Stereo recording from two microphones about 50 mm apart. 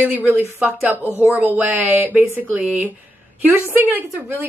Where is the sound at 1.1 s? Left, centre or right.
Right.